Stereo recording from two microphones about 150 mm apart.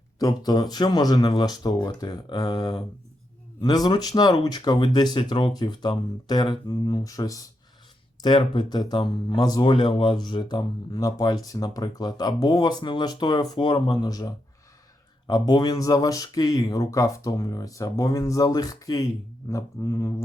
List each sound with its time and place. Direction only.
0.2 s speech: 25° left (ahead or behind)